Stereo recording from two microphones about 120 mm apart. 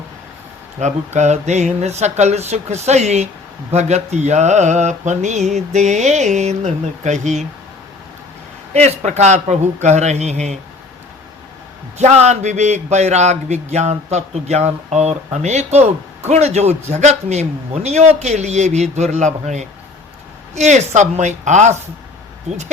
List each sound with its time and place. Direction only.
0.8 s a man's voice: 75° right (ahead or behind)
8.7 s a man's voice: 70° right (ahead or behind)
11.9 s a man's voice: 70° right (ahead or behind)